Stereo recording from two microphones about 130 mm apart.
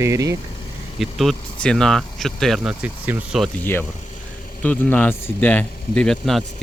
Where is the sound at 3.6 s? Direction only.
15° left (ahead or behind).